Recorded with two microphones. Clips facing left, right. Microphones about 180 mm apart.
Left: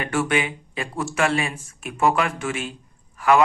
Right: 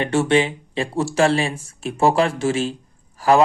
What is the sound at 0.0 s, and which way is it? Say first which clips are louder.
Speech: right 5 dB; 30° right (ahead or behind).